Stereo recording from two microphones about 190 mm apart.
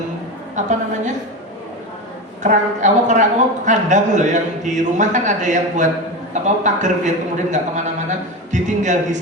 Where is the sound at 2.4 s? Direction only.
40° right (ahead or behind).